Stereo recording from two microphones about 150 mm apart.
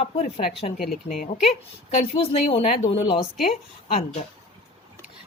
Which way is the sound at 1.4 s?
40° left (ahead or behind).